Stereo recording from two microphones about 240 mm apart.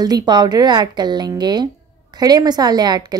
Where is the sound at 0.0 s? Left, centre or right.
Centre.